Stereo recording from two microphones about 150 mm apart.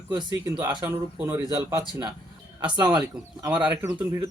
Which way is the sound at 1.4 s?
30° right (ahead or behind).